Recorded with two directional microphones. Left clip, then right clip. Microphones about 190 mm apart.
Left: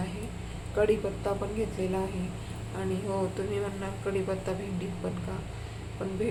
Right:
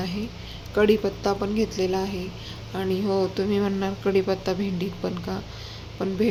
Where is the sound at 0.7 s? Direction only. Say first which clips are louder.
Right 6 dB; 50° right (ahead or behind).